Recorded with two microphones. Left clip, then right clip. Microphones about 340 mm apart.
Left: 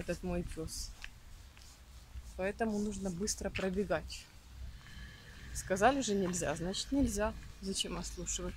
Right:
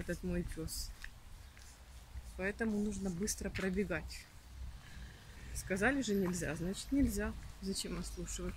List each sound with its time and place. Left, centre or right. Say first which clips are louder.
0.0 s speech: left 3 dB; centre
2.3 s speech: left 3 dB; centre
5.5 s speech: left 5 dB; centre